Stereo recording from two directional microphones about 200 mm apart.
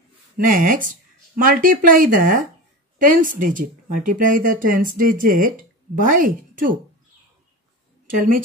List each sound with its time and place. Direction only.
0.4 s speech: 45° right (ahead or behind)
8.1 s speech: 45° right (ahead or behind)